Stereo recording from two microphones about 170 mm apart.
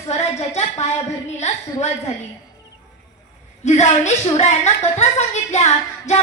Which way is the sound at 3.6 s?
40° left (ahead or behind).